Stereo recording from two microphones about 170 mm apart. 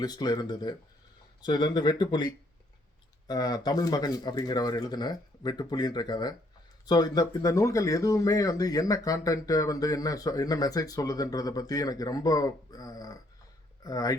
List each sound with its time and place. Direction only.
0.0 s speech: 25° left (ahead or behind)